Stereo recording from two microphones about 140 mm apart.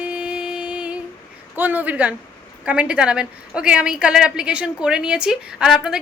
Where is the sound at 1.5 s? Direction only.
10° right (ahead or behind).